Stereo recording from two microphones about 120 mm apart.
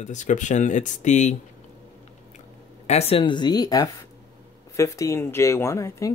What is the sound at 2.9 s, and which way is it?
A woman's voice, 55° left (ahead or behind).